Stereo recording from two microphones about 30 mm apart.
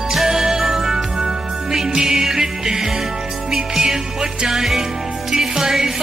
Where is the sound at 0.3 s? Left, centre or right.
Centre.